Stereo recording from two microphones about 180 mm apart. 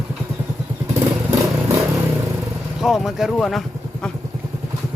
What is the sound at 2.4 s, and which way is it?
Vehicle, centre (ahead or behind).